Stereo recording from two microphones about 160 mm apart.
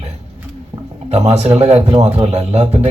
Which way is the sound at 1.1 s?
40° right (ahead or behind).